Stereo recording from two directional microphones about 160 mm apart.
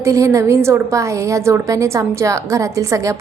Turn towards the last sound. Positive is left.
turn(degrees=-20)  # may be behind; listen again after turning